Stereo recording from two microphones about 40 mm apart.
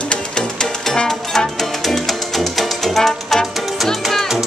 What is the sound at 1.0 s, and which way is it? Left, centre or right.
Music, centre.